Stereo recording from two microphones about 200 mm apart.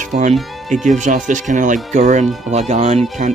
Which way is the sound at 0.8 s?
40° right (ahead or behind).